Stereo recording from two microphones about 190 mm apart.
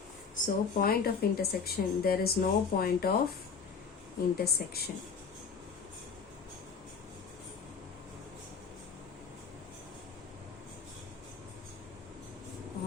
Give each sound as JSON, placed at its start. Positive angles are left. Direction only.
{"t": 0.4, "sound": "speech", "side_deg": 50}
{"t": 4.4, "sound": "speech", "side_deg": 55}